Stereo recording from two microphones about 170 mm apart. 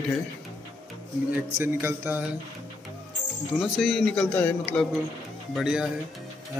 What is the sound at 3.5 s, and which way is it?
Speech, centre (ahead or behind).